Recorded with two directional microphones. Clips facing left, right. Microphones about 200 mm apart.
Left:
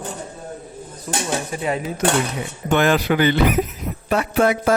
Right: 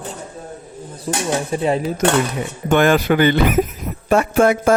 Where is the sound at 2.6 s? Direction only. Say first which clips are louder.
Right 3 dB; 50° right (ahead or behind).